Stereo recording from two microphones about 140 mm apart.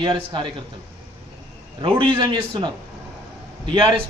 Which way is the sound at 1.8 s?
35° right (ahead or behind).